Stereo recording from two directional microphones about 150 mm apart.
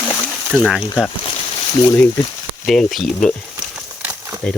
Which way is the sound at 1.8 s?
20° left (ahead or behind).